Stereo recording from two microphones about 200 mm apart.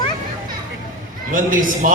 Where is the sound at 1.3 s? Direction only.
40° right (ahead or behind).